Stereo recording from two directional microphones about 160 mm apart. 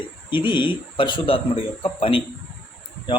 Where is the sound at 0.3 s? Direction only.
30° left (ahead or behind).